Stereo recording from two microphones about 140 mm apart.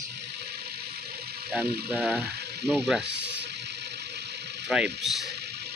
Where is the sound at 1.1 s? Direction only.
90° right.